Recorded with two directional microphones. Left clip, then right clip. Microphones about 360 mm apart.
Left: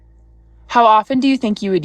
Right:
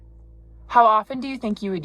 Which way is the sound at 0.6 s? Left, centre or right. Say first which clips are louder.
Left 5 dB; centre.